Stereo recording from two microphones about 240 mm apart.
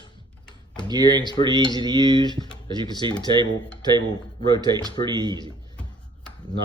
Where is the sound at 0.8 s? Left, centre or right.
Centre.